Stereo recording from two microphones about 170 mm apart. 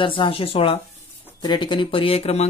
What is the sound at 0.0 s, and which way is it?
Speech, 30° left (ahead or behind).